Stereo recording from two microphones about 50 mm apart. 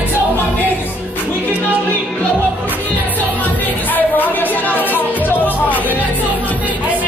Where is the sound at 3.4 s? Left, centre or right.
Left.